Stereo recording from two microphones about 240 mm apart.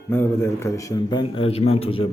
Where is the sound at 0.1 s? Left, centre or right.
Centre.